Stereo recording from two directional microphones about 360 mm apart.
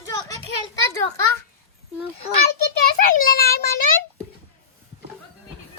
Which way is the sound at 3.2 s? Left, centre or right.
Left.